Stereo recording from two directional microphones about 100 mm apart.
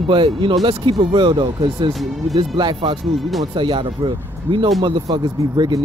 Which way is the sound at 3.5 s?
55° right (ahead or behind).